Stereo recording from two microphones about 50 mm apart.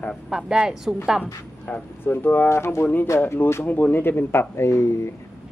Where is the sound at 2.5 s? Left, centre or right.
Left.